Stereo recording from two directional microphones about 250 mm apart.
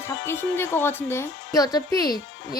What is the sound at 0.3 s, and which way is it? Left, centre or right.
Speech, centre.